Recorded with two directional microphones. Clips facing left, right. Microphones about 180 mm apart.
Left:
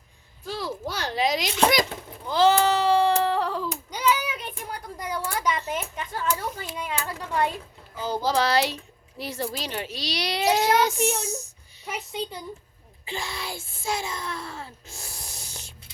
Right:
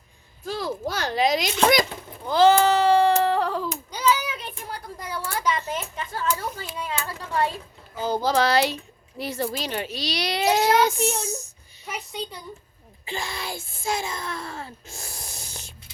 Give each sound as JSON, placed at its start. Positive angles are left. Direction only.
{"t": 0.4, "sound": "a child's voice", "side_deg": -50}
{"t": 2.2, "sound": "a sound", "side_deg": -50}
{"t": 3.9, "sound": "a sound", "side_deg": 15}
{"t": 8.0, "sound": "a child's voice", "side_deg": -50}
{"t": 11.9, "sound": "speech", "side_deg": 25}
{"t": 13.1, "sound": "speech", "side_deg": -50}